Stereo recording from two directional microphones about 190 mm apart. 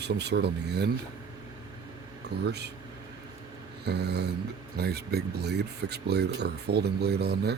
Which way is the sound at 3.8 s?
60° right (ahead or behind).